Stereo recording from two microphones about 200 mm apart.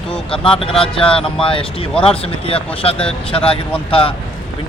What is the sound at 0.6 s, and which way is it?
Speech, 30° left (ahead or behind).